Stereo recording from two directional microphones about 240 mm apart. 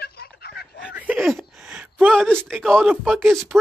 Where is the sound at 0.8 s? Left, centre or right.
Centre.